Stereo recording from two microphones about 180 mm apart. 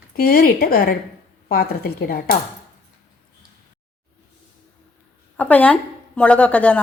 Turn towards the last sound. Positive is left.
turn(degrees=5)  # may be behind; listen again after turning